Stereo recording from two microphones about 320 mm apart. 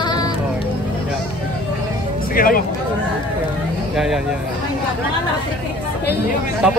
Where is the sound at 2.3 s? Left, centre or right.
Left.